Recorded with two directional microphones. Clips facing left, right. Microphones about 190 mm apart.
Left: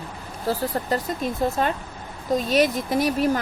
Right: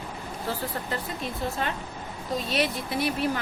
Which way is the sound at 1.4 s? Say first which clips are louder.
Left 7 dB; 45° left (ahead or behind).